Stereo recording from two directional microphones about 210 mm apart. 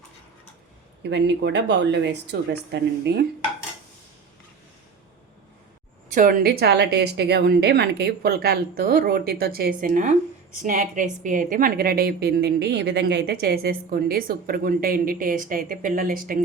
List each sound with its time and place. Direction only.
1.0 s speech: 55° right (ahead or behind)
6.1 s a woman's voice: 40° right (ahead or behind)